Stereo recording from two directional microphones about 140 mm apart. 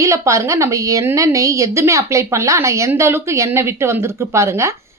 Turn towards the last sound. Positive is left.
turn(degrees=-20)  # may be behind; listen again after turning